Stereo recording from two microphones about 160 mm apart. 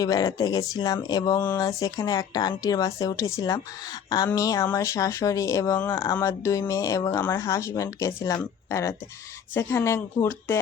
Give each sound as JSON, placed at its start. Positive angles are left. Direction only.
{"t": 0.0, "sound": "speech", "side_deg": 25}